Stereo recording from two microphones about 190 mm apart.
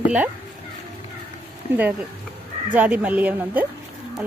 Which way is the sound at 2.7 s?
10° right (ahead or behind).